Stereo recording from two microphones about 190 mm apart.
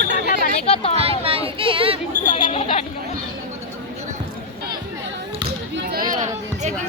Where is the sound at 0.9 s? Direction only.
30° right (ahead or behind).